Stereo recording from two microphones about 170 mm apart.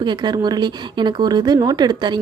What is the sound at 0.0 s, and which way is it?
Speech, 25° right (ahead or behind).